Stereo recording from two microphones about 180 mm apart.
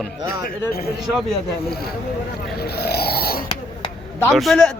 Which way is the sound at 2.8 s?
60° left (ahead or behind).